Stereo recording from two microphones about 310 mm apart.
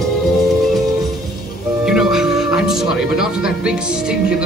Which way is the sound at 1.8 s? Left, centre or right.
Centre.